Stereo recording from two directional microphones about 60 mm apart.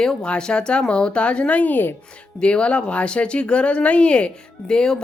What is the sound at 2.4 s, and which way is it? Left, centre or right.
Speech, centre.